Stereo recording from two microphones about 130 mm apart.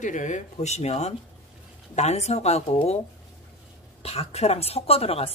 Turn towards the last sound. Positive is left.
turn(degrees=50)  # may be behind; listen again after turning